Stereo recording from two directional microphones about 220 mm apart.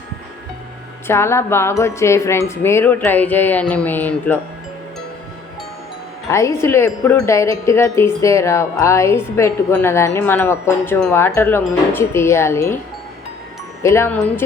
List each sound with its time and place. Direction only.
1.0 s speech: 10° left (ahead or behind)
6.3 s speech: 10° left (ahead or behind)
13.8 s speech: 10° left (ahead or behind)